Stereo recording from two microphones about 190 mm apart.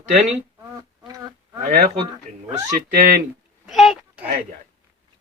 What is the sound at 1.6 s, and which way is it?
Speech, 40° right (ahead or behind).